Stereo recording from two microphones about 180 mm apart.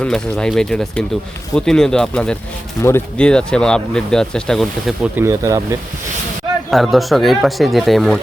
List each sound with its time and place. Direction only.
0.0 s speech: 5° left (ahead or behind)
5.1 s speech: 15° right (ahead or behind)
6.7 s speech: centre (ahead or behind)